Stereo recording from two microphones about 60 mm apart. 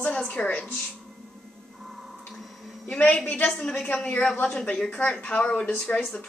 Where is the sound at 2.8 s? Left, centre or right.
Left.